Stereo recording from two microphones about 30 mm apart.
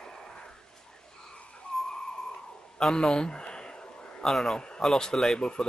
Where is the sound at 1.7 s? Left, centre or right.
Left.